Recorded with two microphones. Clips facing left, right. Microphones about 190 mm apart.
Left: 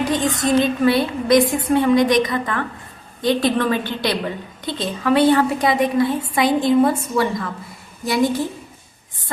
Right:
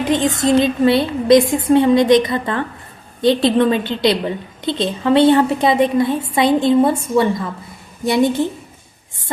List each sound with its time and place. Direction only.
0.0 s a woman's voice: 25° right (ahead or behind)